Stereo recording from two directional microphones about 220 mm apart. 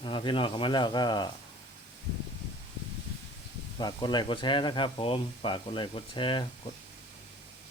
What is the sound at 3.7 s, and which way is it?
Speech, 20° left (ahead or behind).